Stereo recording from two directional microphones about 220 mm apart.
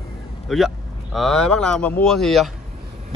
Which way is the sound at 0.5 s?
Centre (ahead or behind).